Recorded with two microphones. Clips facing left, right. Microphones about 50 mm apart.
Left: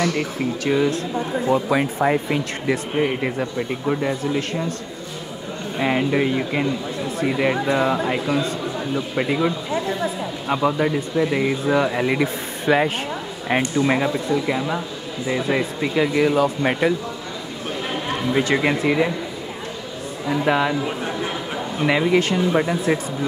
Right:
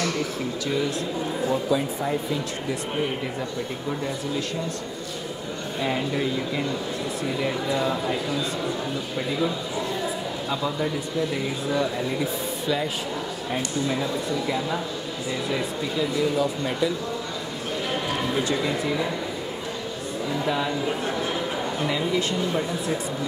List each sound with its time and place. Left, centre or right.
0.7 s speech: left
5.8 s speech: left
10.5 s speech: left
14.3 s speech: left
15.8 s speech: left
18.3 s speech: left
20.2 s speech: left
20.8 s a man's voice: left
21.8 s speech: left
22.5 s speech: left